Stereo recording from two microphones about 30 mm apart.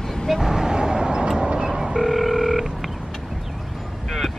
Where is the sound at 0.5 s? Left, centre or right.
Right.